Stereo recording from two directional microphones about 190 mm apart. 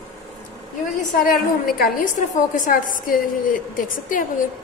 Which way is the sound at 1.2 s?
50° left (ahead or behind).